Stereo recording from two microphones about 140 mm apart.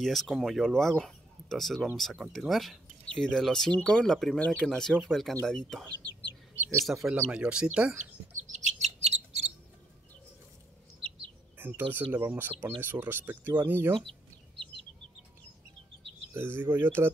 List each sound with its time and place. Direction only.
0.0 s speech: centre (ahead or behind)
6.6 s bird: 20° right (ahead or behind)
6.9 s speech: 5° right (ahead or behind)
8.5 s bird: 55° right (ahead or behind)
9.0 s cricket: 50° right (ahead or behind)
11.5 s speech: 15° right (ahead or behind)
16.3 s speech: 15° right (ahead or behind)